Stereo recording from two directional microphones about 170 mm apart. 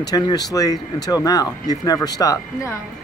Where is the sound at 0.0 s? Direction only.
20° left (ahead or behind).